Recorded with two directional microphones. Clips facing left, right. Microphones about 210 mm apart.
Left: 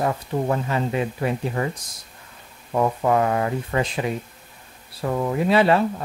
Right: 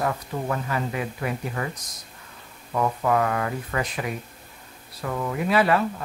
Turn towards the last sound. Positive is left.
turn(degrees=25)  # may be behind; listen again after turning